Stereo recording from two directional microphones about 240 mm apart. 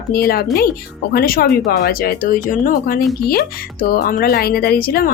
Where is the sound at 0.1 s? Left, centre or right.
Left.